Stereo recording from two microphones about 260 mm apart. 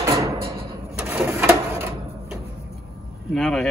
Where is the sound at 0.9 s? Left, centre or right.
Centre.